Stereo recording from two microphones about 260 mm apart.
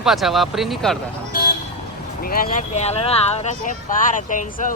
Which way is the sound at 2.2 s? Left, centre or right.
Left.